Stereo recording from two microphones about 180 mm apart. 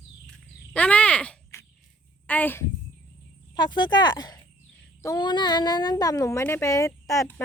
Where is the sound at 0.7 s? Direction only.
5° left (ahead or behind).